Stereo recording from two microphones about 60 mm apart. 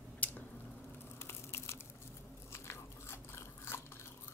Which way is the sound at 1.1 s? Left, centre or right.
Left.